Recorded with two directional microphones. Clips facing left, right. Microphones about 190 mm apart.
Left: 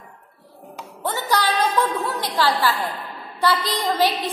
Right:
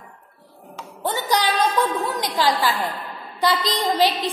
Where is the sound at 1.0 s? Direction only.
15° right (ahead or behind).